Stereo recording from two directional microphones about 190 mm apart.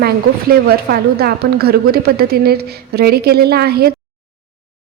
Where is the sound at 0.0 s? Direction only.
55° right (ahead or behind).